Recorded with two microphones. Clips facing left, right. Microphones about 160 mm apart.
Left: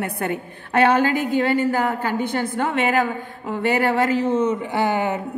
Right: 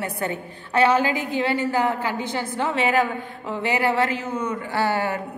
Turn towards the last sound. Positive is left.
turn(degrees=20)  # may be behind; listen again after turning